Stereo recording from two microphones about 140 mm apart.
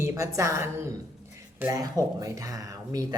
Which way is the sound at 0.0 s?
20° right (ahead or behind).